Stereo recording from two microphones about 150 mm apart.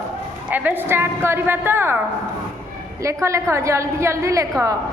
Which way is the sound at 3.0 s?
20° right (ahead or behind).